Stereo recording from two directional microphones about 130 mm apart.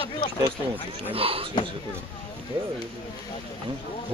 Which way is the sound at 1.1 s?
45° right (ahead or behind).